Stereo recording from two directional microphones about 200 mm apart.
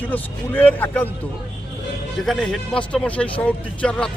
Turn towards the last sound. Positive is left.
turn(degrees=5)  # may be behind; listen again after turning